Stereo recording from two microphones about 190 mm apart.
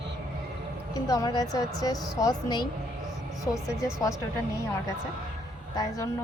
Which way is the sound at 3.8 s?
15° left (ahead or behind).